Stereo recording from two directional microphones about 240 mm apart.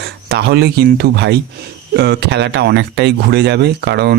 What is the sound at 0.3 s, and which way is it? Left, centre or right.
Speech, right.